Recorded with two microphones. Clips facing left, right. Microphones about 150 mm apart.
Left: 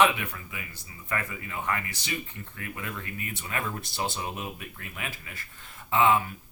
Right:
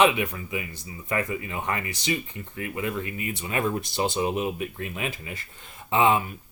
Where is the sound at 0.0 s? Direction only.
20° right (ahead or behind).